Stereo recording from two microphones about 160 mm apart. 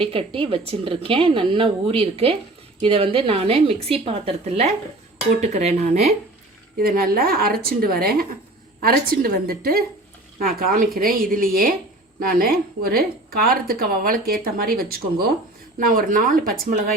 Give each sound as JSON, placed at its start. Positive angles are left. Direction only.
{"t": 0.0, "sound": "a woman's voice", "side_deg": -35}
{"t": 6.7, "sound": "speech", "side_deg": -65}